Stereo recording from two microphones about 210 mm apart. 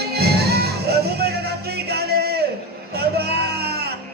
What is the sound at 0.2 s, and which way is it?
Music, 50° right (ahead or behind).